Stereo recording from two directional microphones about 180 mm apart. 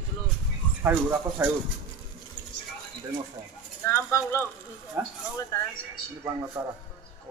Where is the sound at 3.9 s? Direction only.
15° left (ahead or behind).